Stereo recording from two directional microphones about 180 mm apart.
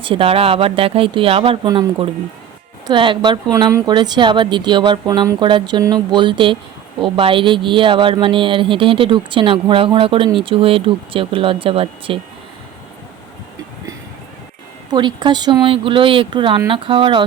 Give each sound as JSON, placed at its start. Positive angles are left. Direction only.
{"t": 0.0, "sound": "speech", "side_deg": -30}
{"t": 14.8, "sound": "speech", "side_deg": -25}